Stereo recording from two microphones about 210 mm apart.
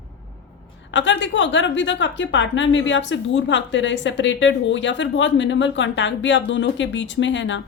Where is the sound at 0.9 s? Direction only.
60° left (ahead or behind).